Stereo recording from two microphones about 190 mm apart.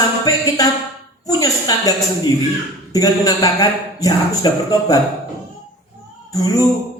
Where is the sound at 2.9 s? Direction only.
20° left (ahead or behind).